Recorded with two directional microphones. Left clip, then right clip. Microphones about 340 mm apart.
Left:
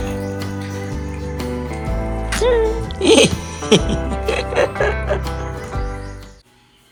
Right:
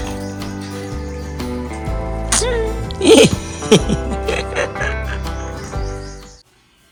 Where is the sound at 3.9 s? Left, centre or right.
Centre.